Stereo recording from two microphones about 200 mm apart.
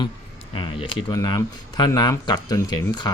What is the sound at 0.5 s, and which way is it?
Speech, 25° left (ahead or behind).